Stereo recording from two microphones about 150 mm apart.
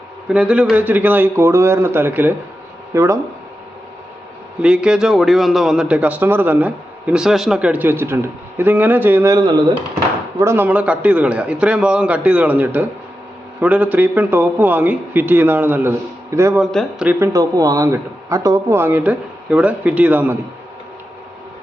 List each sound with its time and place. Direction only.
0.3 s a man's voice: 5° right (ahead or behind)
4.6 s a man's voice: 5° right (ahead or behind)
10.4 s a man's voice: 15° right (ahead or behind)
16.6 s speech: 5° right (ahead or behind)
17.2 s a man's voice: 25° right (ahead or behind)